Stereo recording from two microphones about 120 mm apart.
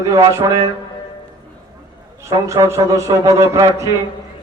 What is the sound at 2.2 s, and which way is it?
Music, 25° right (ahead or behind).